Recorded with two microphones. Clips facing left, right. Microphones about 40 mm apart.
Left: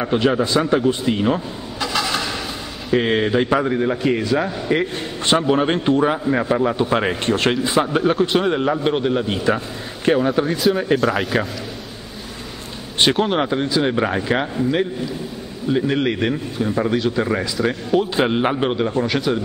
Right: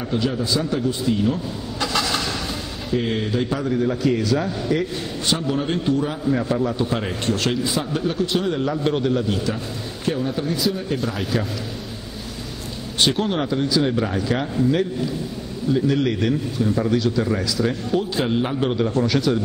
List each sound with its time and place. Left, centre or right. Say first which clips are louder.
0.0 s a man's voice: left 6 dB; left
1.8 s vehicle: left 1 dB; centre
2.9 s a man's voice: left 6 dB; left
10.0 s speech: left 7 dB; left
13.0 s a man's voice: left 3 dB; left
17.6 s speech: left 5 dB; centre
18.1 s a man's voice: left 4 dB; left